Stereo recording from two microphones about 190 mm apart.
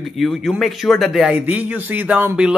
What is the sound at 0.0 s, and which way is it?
Speech, centre (ahead or behind).